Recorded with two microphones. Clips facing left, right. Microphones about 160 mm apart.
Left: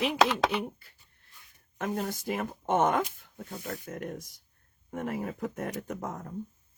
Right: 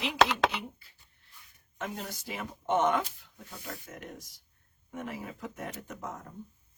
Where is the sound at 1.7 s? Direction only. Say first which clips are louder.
Left 6 dB; 55° left (ahead or behind).